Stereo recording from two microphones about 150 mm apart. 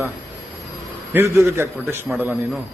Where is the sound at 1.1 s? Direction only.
20° right (ahead or behind).